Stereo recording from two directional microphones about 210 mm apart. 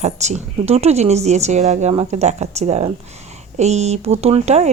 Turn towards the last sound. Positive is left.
turn(degrees=-30)  # may be behind; listen again after turning